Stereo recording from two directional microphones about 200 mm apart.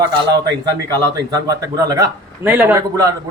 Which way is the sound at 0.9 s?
20° right (ahead or behind).